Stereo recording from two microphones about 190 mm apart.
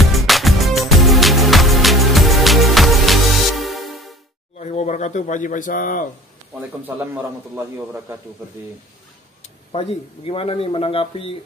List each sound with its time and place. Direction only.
0.0 s music: centre (ahead or behind)
4.6 s speech: 35° left (ahead or behind)
9.4 s speech: 30° left (ahead or behind)